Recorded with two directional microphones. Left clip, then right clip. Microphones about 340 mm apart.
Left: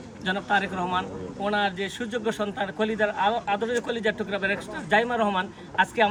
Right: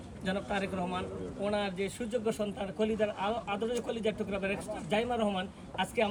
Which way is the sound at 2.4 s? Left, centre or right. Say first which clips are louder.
Left 6 dB; centre.